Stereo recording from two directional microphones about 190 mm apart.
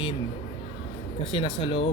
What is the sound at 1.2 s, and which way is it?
Speech, 25° left (ahead or behind).